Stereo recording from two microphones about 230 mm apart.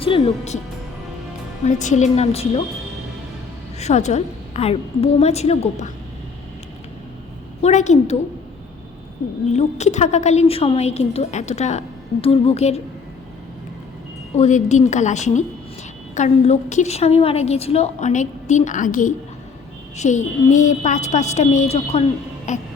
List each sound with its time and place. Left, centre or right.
0.0 s a woman's voice: left
1.6 s a woman's voice: left
3.8 s a woman's voice: left
7.6 s a woman's voice: left
9.5 s a woman's voice: left
14.3 s a woman's voice: left